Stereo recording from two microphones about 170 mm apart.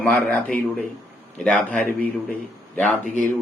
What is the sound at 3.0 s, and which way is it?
Speech, 45° right (ahead or behind).